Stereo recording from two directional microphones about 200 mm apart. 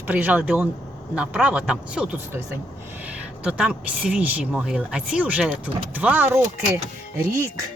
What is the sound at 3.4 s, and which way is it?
Speech, 5° right (ahead or behind).